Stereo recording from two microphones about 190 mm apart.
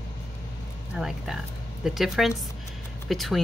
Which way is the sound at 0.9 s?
5° right (ahead or behind).